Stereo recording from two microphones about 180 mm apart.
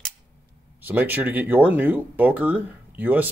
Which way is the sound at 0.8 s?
10° right (ahead or behind).